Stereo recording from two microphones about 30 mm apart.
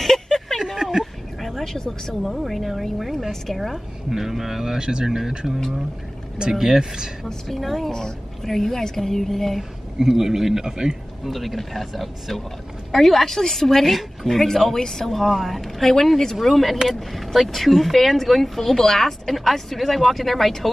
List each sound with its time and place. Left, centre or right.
0.0 s a sound: centre
0.8 s a sound: right
1.6 s a sound: centre
2.2 s speech: centre
4.7 s speech: right
6.5 s speech: centre
7.2 s speech: centre
9.6 s speech: centre
11.2 s speech: centre
15.6 s speech: centre